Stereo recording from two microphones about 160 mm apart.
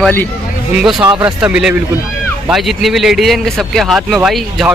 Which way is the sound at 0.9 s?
25° right (ahead or behind).